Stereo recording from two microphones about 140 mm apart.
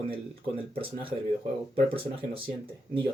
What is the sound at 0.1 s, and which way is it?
Speech, 40° right (ahead or behind).